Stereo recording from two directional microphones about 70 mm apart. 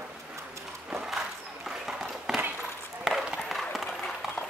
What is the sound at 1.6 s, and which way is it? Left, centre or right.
Run, centre.